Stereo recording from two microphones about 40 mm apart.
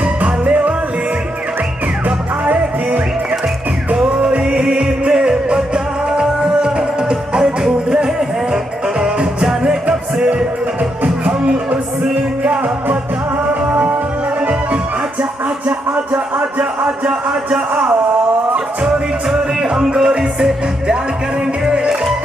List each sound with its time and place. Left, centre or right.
0.2 s music: right
2.0 s music: right
3.9 s music: right
9.8 s music: right
12.4 s music: right
16.1 s music: right
19.6 s music: right